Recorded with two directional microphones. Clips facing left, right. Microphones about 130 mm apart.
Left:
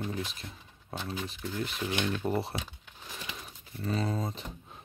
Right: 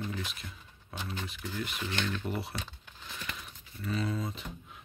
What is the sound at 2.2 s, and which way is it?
Speech, 35° left (ahead or behind).